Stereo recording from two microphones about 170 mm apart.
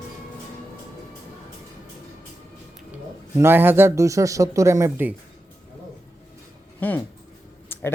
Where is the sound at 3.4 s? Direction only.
15° right (ahead or behind).